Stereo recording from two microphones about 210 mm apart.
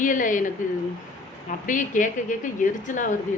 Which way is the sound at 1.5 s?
40° left (ahead or behind).